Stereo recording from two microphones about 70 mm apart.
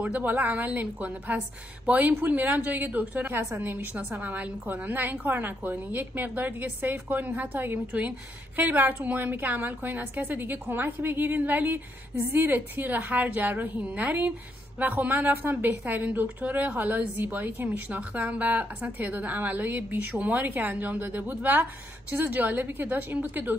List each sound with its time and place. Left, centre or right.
0.0 s a woman's voice: right